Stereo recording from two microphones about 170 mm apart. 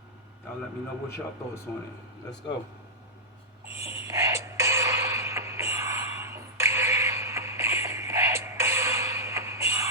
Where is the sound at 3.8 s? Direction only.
15° right (ahead or behind).